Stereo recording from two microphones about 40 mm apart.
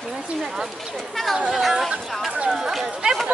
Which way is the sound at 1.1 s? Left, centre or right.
Centre.